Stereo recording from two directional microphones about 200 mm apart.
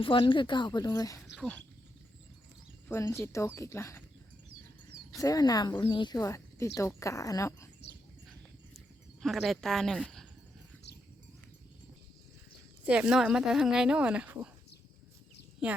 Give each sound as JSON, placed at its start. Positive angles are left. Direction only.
{"t": 0.0, "sound": "speech", "side_deg": 25}
{"t": 1.4, "sound": "speech", "side_deg": 5}
{"t": 2.9, "sound": "speech", "side_deg": 15}
{"t": 5.1, "sound": "speech", "side_deg": 15}
{"t": 9.2, "sound": "speech", "side_deg": 0}
{"t": 12.8, "sound": "speech", "side_deg": -5}
{"t": 15.6, "sound": "speech", "side_deg": -5}